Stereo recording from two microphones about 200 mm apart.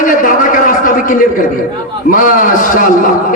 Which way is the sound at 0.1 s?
40° left (ahead or behind).